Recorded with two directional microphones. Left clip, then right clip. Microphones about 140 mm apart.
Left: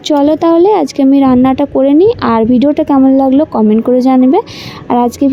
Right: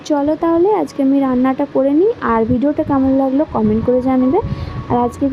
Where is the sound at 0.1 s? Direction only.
30° left (ahead or behind).